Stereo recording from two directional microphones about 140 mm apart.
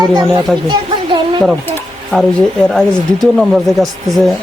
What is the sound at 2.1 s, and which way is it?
A man's voice, centre (ahead or behind).